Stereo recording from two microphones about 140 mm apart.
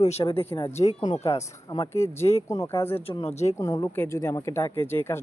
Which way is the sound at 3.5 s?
25° left (ahead or behind).